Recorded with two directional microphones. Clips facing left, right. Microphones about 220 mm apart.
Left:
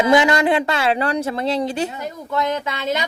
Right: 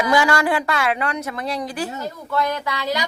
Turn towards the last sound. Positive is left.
turn(degrees=25)  # may be behind; listen again after turning